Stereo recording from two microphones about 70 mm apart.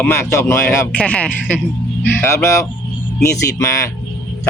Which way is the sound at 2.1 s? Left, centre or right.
Left.